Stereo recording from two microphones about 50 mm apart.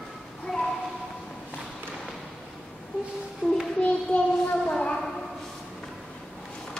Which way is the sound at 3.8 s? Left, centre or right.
Left.